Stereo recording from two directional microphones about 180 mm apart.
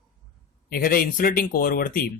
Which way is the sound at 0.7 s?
55° left (ahead or behind).